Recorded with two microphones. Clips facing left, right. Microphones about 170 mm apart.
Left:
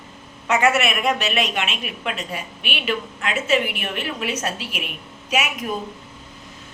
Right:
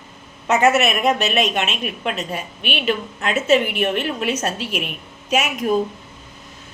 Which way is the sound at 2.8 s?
30° right (ahead or behind).